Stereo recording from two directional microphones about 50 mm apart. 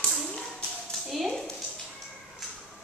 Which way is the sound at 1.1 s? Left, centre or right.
Centre.